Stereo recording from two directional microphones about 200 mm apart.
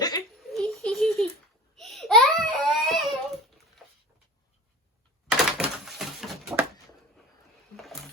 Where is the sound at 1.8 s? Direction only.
Centre (ahead or behind).